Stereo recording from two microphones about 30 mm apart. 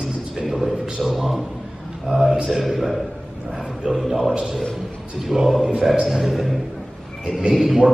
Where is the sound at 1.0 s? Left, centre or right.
Centre.